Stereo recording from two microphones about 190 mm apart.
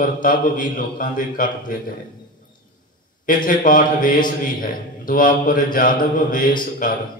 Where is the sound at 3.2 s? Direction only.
45° left (ahead or behind).